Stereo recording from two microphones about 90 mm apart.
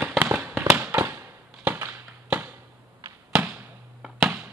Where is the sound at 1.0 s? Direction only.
30° right (ahead or behind).